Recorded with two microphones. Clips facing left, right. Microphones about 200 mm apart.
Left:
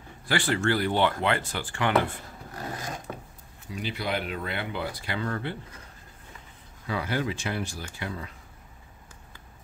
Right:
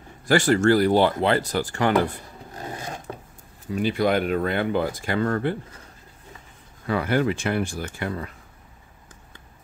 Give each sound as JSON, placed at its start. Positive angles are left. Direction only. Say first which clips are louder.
{"t": 0.3, "sound": "speech", "louder": "right 8 dB", "side_deg": -45}
{"t": 3.6, "sound": "speech", "louder": "right 10 dB", "side_deg": -45}
{"t": 6.9, "sound": "speech", "louder": "right 7 dB", "side_deg": -55}